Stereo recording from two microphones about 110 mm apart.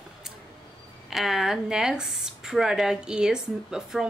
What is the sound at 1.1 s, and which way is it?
Speech, centre (ahead or behind).